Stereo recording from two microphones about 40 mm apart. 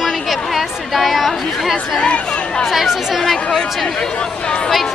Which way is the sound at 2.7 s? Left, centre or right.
Centre.